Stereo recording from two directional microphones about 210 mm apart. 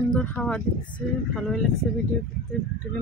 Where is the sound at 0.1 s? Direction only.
5° left (ahead or behind).